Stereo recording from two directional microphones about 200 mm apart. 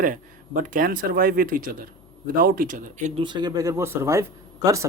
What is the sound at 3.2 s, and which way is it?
A man's voice, 20° right (ahead or behind).